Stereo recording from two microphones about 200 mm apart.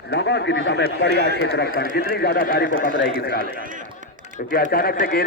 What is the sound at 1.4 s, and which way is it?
A man's voice, 55° left (ahead or behind).